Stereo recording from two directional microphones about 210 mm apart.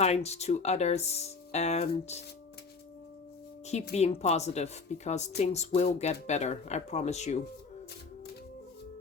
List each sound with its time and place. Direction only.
0.0 s speech: 30° left (ahead or behind)
3.9 s speech: 30° left (ahead or behind)